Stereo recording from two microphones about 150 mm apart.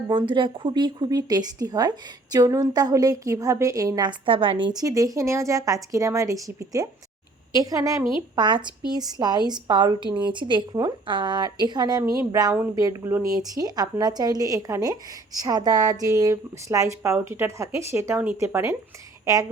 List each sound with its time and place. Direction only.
0.1 s a woman's voice: 35° right (ahead or behind)